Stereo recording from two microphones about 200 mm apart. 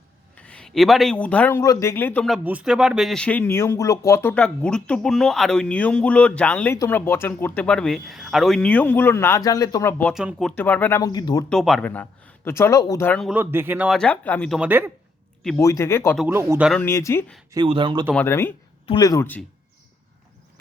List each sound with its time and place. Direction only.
0.3 s speech: 5° left (ahead or behind)
10.2 s speech: centre (ahead or behind); by 11.4 s 20° left (ahead or behind)
11.4 s speech: centre (ahead or behind)
13.3 s speech: 10° right (ahead or behind); by 14.6 s 5° left (ahead or behind)
14.6 s speech: 10° right (ahead or behind)
15.5 s speech: 15° left (ahead or behind)
16.1 s speech: 10° right (ahead or behind)
16.6 s speech: 5° left (ahead or behind)
17.5 s speech: 25° right (ahead or behind)
18.1 s speech: 10° left (ahead or behind)